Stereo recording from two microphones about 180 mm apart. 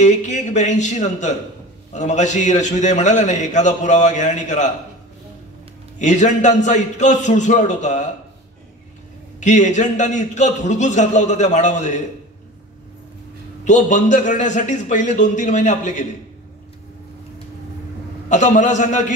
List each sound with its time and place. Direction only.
0.0 s a man's voice: 40° left (ahead or behind)
5.9 s a man's voice: 40° left (ahead or behind)
9.4 s a man's voice: 40° left (ahead or behind)
13.7 s a man's voice: 40° left (ahead or behind)
18.3 s a man's voice: 40° left (ahead or behind)